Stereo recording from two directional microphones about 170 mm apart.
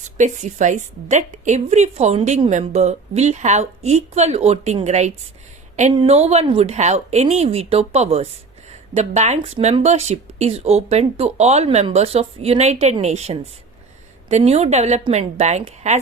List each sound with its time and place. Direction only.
0.2 s a woman's voice: 45° right (ahead or behind)